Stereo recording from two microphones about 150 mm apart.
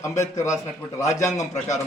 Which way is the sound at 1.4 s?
50° left (ahead or behind).